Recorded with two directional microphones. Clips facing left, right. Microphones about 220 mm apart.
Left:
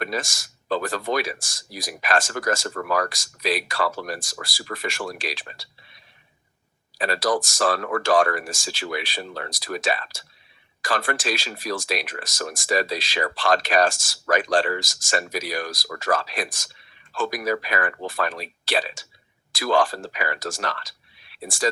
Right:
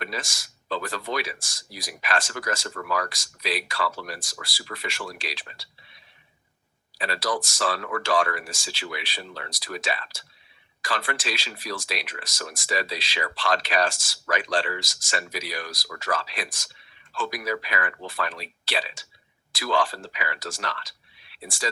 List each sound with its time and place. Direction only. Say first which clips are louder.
0.0 s speech: left 6 dB; 45° left (ahead or behind)
7.0 s speech: left 5 dB; 45° left (ahead or behind)